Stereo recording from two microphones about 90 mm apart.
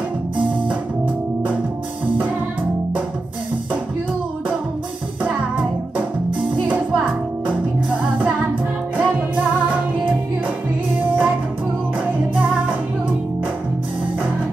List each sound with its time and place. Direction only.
5.2 s music: 10° right (ahead or behind)